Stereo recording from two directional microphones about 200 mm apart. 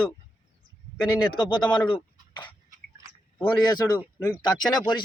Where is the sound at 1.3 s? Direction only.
20° left (ahead or behind).